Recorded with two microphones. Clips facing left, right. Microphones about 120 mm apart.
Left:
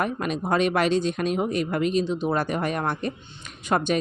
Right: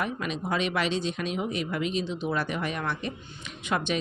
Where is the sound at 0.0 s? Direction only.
50° left (ahead or behind).